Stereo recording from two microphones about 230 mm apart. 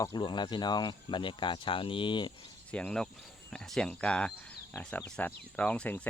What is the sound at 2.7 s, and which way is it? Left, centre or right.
Speech, centre.